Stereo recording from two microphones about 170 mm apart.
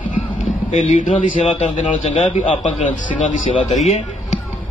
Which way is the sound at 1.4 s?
45° left (ahead or behind).